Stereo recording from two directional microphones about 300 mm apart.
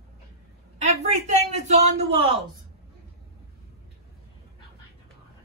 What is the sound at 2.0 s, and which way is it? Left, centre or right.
Speech, centre.